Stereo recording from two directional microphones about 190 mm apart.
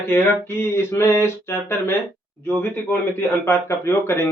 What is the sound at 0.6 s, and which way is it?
Speech, 15° left (ahead or behind).